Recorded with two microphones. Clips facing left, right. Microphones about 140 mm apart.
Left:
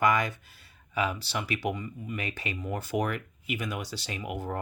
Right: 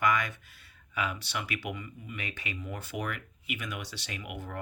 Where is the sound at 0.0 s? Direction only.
35° left (ahead or behind).